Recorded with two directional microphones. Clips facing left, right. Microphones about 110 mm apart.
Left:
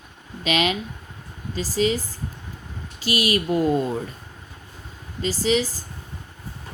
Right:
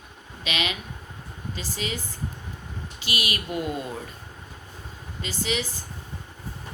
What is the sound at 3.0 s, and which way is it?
Speech, 40° left (ahead or behind).